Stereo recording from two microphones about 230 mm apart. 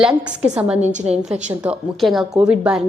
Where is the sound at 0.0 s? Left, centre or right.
Centre.